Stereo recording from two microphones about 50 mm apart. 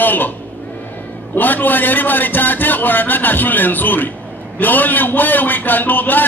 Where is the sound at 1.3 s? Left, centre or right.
Left.